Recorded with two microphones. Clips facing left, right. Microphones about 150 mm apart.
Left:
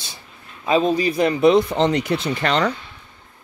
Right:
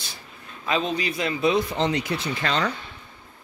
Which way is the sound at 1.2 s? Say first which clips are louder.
Left 7 dB; 60° left (ahead or behind).